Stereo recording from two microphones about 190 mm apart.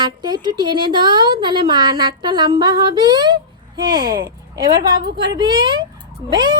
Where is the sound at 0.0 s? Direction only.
25° right (ahead or behind).